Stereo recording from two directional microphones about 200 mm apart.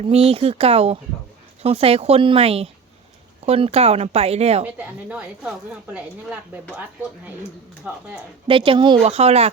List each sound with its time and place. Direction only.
0.1 s speech: 30° right (ahead or behind)
4.6 s a woman's voice: 5° right (ahead or behind)
7.9 s speech: 5° right (ahead or behind)
8.4 s speech: 25° right (ahead or behind)